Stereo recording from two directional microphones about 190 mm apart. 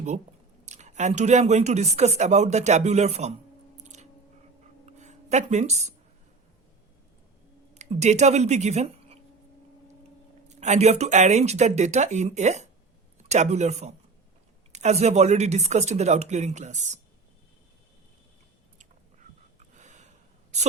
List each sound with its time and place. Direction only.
0.6 s speech: 35° right (ahead or behind)
3.8 s chewing: 35° right (ahead or behind)
4.9 s speech: 40° right (ahead or behind)
7.7 s speech: 35° right (ahead or behind)
10.5 s speech: 35° right (ahead or behind)
19.5 s a sound: 40° right (ahead or behind)